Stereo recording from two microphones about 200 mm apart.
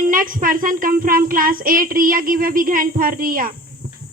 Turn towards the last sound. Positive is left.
turn(degrees=-45)  # may be behind; listen again after turning